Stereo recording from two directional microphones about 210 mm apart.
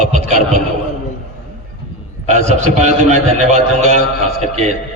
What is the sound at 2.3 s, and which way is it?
A man's voice, 35° right (ahead or behind).